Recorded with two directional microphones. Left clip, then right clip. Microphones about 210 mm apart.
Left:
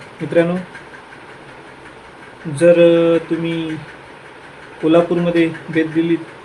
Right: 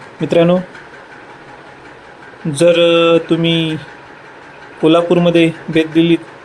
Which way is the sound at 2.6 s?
30° right (ahead or behind).